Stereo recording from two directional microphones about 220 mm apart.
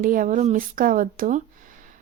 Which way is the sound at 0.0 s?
35° right (ahead or behind).